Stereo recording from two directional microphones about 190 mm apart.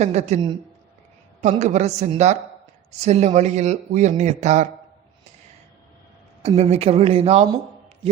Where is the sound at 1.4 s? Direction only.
40° right (ahead or behind).